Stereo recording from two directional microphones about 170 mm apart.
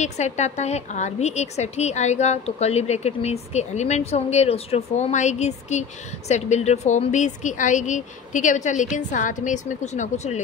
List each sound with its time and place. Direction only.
0.0 s a woman's voice: 40° left (ahead or behind)